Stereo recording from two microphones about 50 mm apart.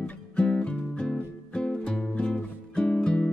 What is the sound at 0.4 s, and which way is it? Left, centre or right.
Music, left.